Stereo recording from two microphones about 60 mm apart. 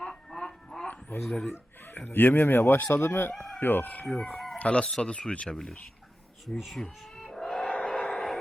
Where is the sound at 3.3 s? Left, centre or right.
Centre.